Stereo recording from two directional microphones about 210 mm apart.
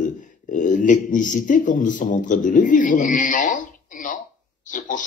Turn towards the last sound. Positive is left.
turn(degrees=40)  # may be behind; listen again after turning